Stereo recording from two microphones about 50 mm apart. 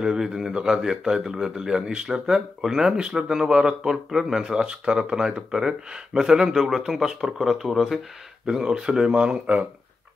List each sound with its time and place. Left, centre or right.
0.0 s speech: centre
8.5 s speech: centre